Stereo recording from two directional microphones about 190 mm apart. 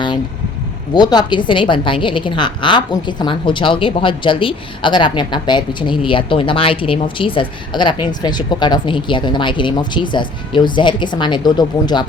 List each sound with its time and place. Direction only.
0.9 s a woman's voice: 20° left (ahead or behind)